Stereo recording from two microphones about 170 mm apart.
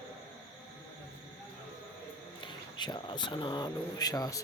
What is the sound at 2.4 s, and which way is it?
Speech, 25° left (ahead or behind).